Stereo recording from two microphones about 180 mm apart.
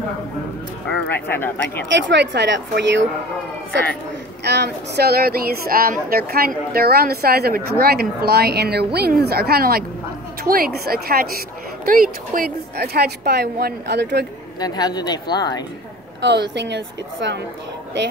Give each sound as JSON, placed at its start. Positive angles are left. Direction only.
{"t": 1.1, "sound": "speech", "side_deg": 10}
{"t": 2.0, "sound": "speech", "side_deg": -75}
{"t": 4.5, "sound": "speech", "side_deg": -65}
{"t": 14.6, "sound": "speech", "side_deg": 20}
{"t": 16.2, "sound": "speech", "side_deg": -75}